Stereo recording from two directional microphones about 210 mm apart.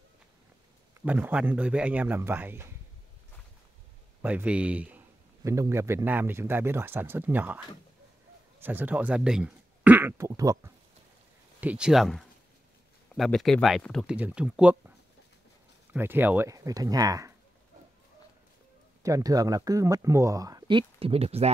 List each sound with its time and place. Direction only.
1.0 s a man's voice: 10° right (ahead or behind)
4.2 s a man's voice: 10° right (ahead or behind)
11.6 s speech: 5° right (ahead or behind)
15.9 s a man's voice: 10° right (ahead or behind)
19.0 s a man's voice: 15° right (ahead or behind)